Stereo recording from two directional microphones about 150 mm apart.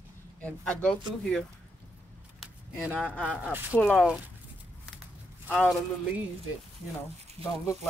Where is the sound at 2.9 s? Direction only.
10° left (ahead or behind).